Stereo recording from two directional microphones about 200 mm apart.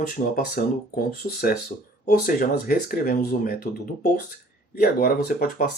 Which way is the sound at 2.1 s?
50° left (ahead or behind).